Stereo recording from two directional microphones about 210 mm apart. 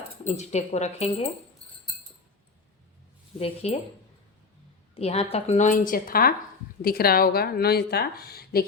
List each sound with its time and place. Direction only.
0.3 s speech: 30° left (ahead or behind)
3.3 s speech: 30° left (ahead or behind)
4.9 s a woman's voice: 30° left (ahead or behind); by 8.6 s 45° left (ahead or behind)